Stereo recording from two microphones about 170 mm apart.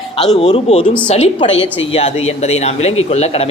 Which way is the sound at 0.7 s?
40° left (ahead or behind).